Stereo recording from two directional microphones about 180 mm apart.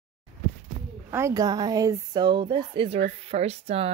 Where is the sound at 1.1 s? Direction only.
15° right (ahead or behind).